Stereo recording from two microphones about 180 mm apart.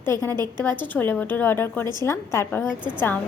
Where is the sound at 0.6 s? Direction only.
10° left (ahead or behind).